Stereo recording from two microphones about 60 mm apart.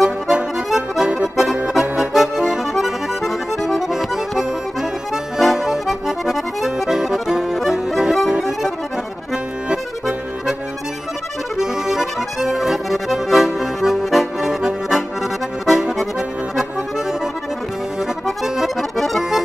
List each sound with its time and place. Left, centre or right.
0.0 s music: centre
1.7 s accordion: centre
11.5 s accordion: centre
18.0 s accordion: centre